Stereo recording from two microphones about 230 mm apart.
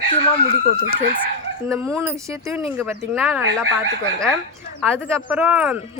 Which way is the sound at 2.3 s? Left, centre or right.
Centre.